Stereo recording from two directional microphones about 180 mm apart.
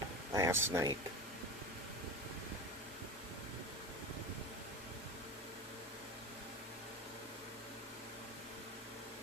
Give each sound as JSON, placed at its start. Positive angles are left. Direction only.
{"t": 0.3, "sound": "speech", "side_deg": -15}